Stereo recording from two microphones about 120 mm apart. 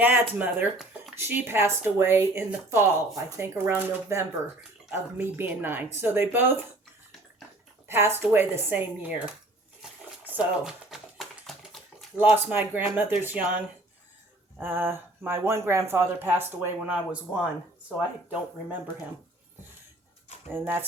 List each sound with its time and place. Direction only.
0.0 s a woman's voice: 15° right (ahead or behind)
7.9 s speech: 20° right (ahead or behind)
10.3 s typing: 5° right (ahead or behind)
12.2 s speech: 15° right (ahead or behind)
14.6 s speech: 15° right (ahead or behind)
20.5 s a woman's voice: 20° right (ahead or behind)